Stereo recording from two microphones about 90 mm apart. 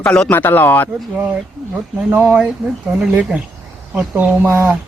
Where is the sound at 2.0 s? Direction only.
20° right (ahead or behind).